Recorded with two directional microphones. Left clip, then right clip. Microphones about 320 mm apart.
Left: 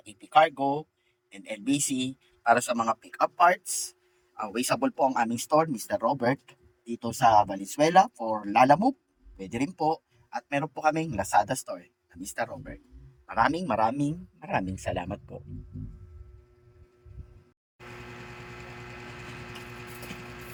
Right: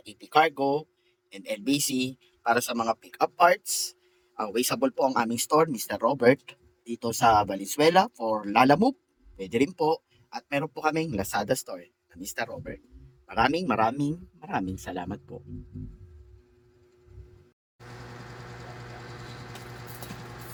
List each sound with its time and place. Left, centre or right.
0.0 s speech: centre